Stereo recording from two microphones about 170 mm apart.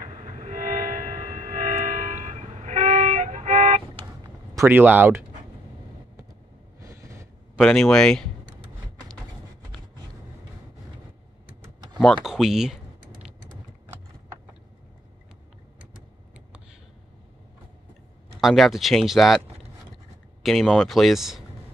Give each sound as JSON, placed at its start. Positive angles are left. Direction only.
{"t": 0.0, "sound": "train", "side_deg": -45}
{"t": 4.6, "sound": "speech", "side_deg": -10}
{"t": 6.8, "sound": "vehicle", "side_deg": -20}
{"t": 7.5, "sound": "speech", "side_deg": 0}
{"t": 12.0, "sound": "speech", "side_deg": 0}
{"t": 18.4, "sound": "speech", "side_deg": 0}
{"t": 20.4, "sound": "speech", "side_deg": 0}